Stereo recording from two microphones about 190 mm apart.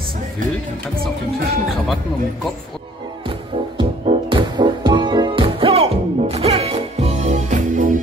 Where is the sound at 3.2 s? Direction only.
25° right (ahead or behind).